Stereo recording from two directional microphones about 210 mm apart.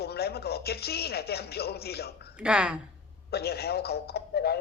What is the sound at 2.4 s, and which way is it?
Speech, 5° right (ahead or behind).